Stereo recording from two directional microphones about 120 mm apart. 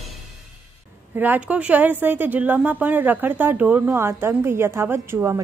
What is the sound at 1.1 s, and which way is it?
A woman's voice, 15° right (ahead or behind).